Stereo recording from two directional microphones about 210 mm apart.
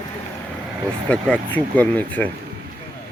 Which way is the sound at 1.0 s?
5° left (ahead or behind).